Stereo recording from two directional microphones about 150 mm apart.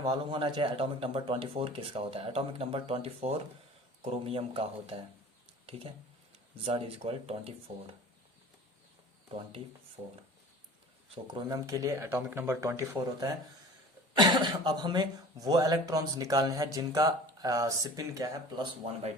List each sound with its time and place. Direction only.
0.0 s speech: 40° right (ahead or behind)
6.7 s speech: 40° right (ahead or behind)
11.4 s speech: 20° right (ahead or behind)